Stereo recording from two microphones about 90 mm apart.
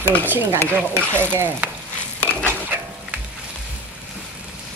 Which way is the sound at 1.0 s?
15° left (ahead or behind).